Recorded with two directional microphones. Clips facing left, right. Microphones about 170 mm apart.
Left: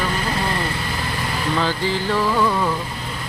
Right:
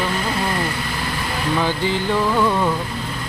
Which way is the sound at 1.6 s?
15° right (ahead or behind).